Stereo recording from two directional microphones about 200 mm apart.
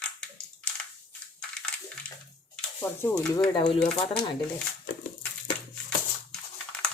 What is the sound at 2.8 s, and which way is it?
Speech, 10° left (ahead or behind).